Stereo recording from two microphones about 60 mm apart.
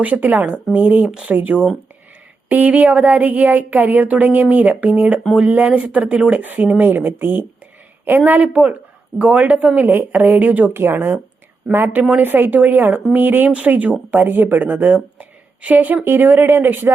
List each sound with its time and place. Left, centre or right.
0.0 s a woman's voice: right
1.0 s speech: centre
1.4 s a woman's voice: right
11.6 s speech: centre
12.1 s a woman's voice: right